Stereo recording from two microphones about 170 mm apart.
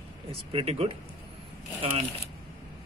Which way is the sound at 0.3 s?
35° right (ahead or behind).